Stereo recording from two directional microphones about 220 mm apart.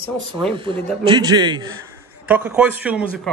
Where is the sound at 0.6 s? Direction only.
25° right (ahead or behind).